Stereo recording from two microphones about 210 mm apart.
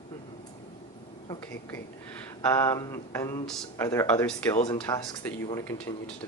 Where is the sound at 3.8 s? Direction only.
15° left (ahead or behind).